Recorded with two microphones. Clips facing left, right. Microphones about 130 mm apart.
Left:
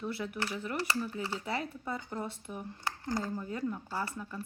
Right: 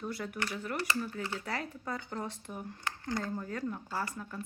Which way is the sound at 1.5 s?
5° left (ahead or behind).